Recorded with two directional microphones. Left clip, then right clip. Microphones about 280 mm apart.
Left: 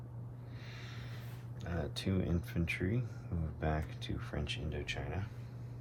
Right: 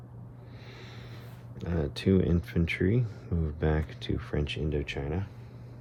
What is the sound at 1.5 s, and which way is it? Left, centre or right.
Speech, right.